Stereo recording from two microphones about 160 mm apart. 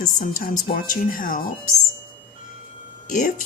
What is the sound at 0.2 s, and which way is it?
Speech, 65° left (ahead or behind).